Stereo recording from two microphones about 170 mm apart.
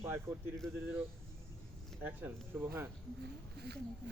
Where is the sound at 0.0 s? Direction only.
15° right (ahead or behind).